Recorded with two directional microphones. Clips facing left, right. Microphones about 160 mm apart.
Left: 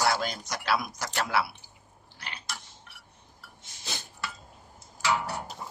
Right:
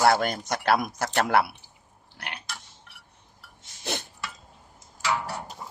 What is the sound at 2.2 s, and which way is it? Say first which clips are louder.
Burping: right 4 dB; 65° right (ahead or behind).